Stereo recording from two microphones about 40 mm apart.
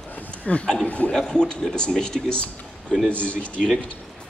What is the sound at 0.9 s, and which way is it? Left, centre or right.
Speech, left.